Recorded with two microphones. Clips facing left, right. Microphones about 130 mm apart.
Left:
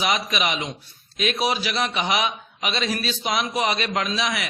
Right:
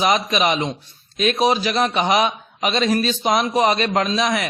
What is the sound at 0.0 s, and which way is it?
A man's voice, 40° right (ahead or behind).